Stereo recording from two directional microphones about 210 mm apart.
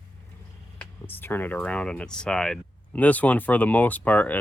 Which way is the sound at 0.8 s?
10° left (ahead or behind).